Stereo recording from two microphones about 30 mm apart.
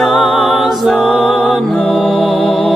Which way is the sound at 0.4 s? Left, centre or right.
Centre.